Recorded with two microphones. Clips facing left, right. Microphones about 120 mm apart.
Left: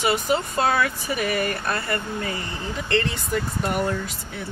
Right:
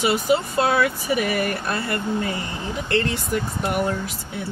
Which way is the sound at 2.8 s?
5° right (ahead or behind).